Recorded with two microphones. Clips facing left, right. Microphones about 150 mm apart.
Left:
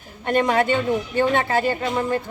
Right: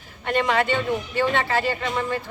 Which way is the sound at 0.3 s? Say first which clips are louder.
Left 3 dB; 45° left (ahead or behind).